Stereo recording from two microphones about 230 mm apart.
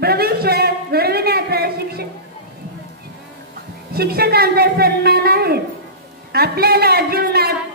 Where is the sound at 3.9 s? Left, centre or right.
Right.